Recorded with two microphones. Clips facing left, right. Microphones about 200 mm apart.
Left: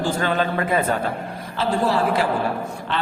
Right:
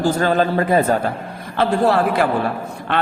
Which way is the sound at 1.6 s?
60° right (ahead or behind).